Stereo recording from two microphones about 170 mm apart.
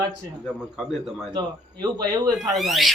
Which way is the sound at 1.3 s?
25° right (ahead or behind).